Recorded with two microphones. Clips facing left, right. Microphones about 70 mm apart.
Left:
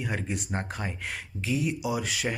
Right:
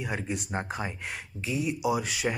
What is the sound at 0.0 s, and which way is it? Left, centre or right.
Speech, centre.